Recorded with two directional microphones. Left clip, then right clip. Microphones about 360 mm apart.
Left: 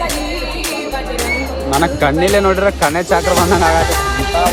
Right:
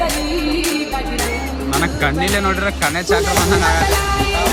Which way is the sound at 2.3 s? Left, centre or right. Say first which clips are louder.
Left 6 dB; left.